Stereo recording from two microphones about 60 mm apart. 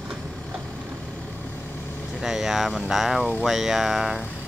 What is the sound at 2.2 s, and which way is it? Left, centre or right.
Speech, centre.